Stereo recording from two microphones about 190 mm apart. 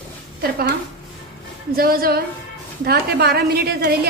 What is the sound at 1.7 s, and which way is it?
A woman's voice, 50° right (ahead or behind).